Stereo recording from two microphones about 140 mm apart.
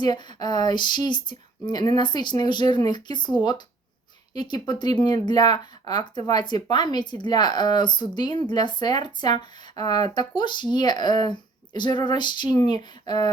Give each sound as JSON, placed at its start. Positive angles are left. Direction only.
{"t": 0.0, "sound": "speech", "side_deg": 30}